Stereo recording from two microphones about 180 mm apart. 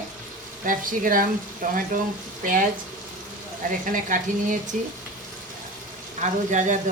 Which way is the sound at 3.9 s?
45° right (ahead or behind).